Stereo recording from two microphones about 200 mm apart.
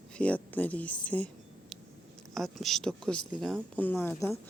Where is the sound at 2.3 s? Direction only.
Centre (ahead or behind).